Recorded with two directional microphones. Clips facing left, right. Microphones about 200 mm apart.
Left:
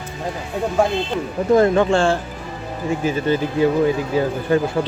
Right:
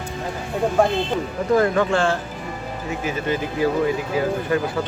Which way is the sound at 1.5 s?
25° left (ahead or behind).